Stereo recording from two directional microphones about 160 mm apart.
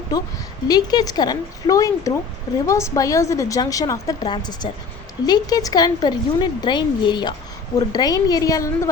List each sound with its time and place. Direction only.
0.7 s speech: 25° left (ahead or behind)